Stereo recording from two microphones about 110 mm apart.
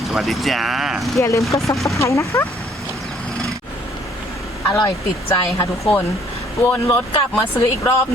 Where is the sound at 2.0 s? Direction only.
25° left (ahead or behind).